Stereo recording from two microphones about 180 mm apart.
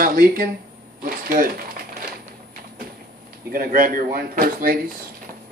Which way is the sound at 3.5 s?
50° right (ahead or behind).